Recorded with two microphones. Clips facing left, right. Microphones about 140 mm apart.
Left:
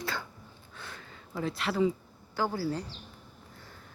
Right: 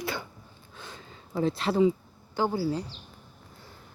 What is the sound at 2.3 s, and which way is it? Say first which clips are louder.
Speech: right 4 dB; 20° right (ahead or behind).